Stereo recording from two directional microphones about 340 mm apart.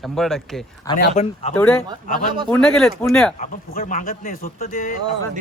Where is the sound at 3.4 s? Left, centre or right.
Left.